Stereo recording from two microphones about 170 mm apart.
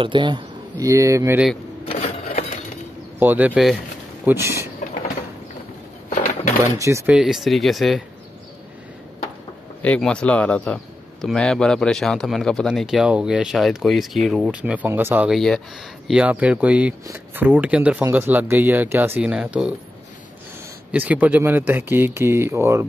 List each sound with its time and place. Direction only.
0.0 s speech: 30° right (ahead or behind)
1.9 s a sound: 35° left (ahead or behind)
3.2 s speech: 10° right (ahead or behind)
6.0 s a sound: 50° left (ahead or behind)
6.8 s speech: 15° right (ahead or behind)
7.2 s a man's voice: 5° right (ahead or behind)
9.8 s a man's voice: 5° left (ahead or behind)
20.9 s speech: 10° right (ahead or behind)